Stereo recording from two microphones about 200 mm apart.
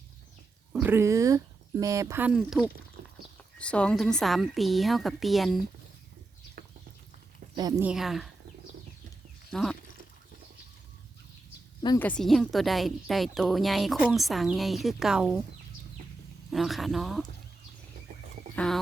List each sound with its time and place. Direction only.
0.7 s a woman's voice: 10° right (ahead or behind)
6.6 s horse: 45° right (ahead or behind)
7.5 s speech: 20° right (ahead or behind)
7.9 s a woman's voice: centre (ahead or behind)
9.5 s speech: 5° left (ahead or behind)
11.9 s a woman's voice: 5° left (ahead or behind)
16.5 s a woman's voice: centre (ahead or behind)
18.5 s speech: 5° left (ahead or behind)